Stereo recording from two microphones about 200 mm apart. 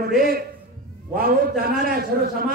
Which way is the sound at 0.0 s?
45° right (ahead or behind).